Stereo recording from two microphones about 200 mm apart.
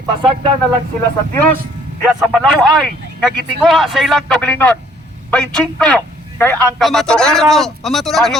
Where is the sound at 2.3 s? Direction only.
Centre (ahead or behind).